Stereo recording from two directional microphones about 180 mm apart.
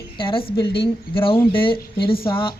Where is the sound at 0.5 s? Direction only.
65° left (ahead or behind).